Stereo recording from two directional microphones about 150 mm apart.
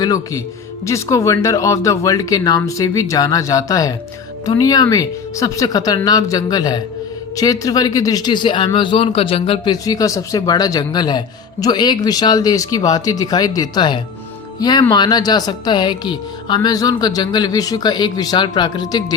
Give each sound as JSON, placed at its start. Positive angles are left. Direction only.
{"t": 0.0, "sound": "speech", "side_deg": 25}
{"t": 9.8, "sound": "speech", "side_deg": 25}